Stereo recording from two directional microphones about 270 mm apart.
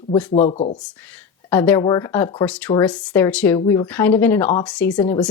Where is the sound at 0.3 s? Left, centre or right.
Left.